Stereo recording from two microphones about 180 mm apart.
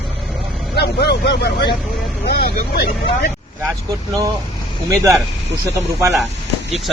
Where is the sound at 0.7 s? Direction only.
65° left (ahead or behind).